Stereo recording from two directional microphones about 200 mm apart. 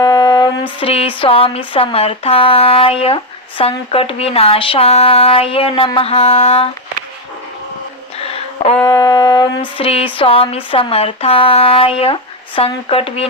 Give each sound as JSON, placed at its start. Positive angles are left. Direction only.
{"t": 0.0, "sound": "speech", "side_deg": 20}
{"t": 8.7, "sound": "a sound", "side_deg": 15}
{"t": 10.2, "sound": "speech", "side_deg": 25}